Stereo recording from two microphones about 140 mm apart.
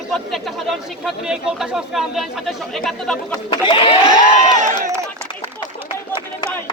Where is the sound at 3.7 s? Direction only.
40° left (ahead or behind).